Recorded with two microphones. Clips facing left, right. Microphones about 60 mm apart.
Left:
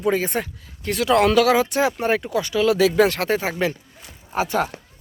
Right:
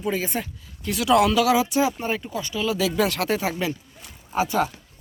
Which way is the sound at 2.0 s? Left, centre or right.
Left.